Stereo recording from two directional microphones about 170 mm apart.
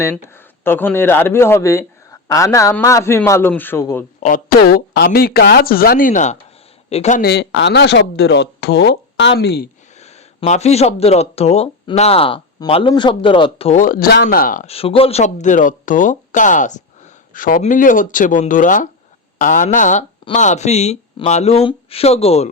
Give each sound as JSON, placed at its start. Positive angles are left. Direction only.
{"t": 0.0, "sound": "a man's voice", "side_deg": 15}
{"t": 4.2, "sound": "a woman's voice", "side_deg": 55}
{"t": 7.2, "sound": "speech", "side_deg": 70}
{"t": 10.0, "sound": "speech", "side_deg": 40}
{"t": 13.7, "sound": "a woman's voice", "side_deg": 55}
{"t": 14.7, "sound": "speech", "side_deg": 35}